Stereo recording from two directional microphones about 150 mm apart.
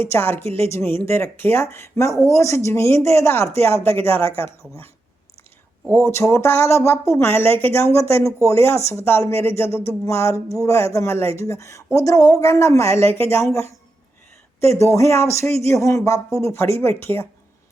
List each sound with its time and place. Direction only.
0.0 s speech: 15° left (ahead or behind)
5.9 s speech: 15° left (ahead or behind)